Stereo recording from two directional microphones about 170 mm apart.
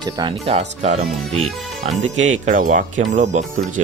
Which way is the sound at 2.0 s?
45° right (ahead or behind).